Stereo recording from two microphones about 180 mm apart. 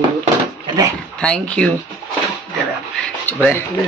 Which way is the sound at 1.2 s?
5° left (ahead or behind).